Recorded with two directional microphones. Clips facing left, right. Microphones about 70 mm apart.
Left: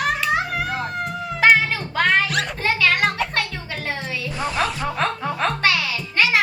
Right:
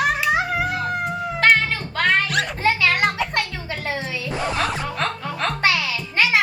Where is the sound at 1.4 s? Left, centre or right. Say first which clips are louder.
Left 2 dB; centre.